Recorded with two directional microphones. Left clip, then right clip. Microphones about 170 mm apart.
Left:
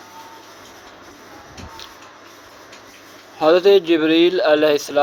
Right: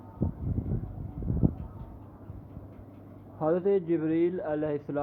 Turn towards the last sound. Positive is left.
turn(degrees=35)  # may be behind; listen again after turning